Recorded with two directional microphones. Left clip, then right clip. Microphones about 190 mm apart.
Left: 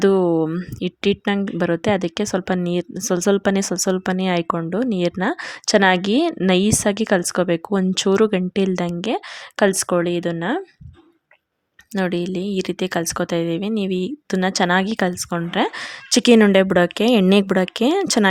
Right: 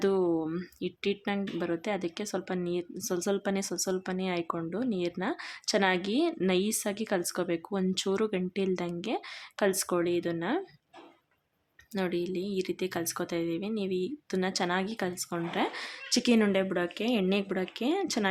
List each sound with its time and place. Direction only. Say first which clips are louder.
0.0 s speech: left 11 dB; 45° left (ahead or behind)
11.9 s speech: left 9 dB; 45° left (ahead or behind)